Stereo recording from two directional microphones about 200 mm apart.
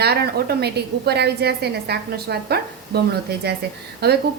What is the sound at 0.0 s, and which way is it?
A woman's voice, 55° right (ahead or behind).